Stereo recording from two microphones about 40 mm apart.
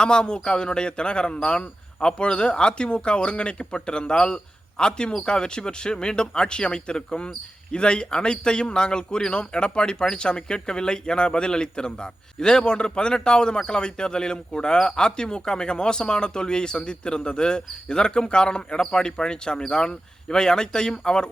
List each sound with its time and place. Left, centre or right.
0.0 s a man's voice: left